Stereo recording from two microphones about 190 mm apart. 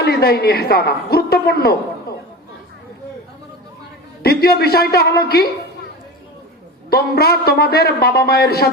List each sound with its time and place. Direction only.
0.0 s a woman's voice: 55° left (ahead or behind)
4.2 s a man's voice: 55° left (ahead or behind)
6.9 s a man's voice: 55° left (ahead or behind)